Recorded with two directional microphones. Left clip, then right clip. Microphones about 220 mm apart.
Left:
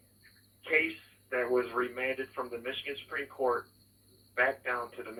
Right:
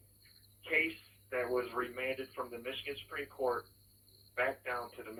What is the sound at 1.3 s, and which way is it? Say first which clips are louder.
A man's voice: left 5 dB; 25° left (ahead or behind).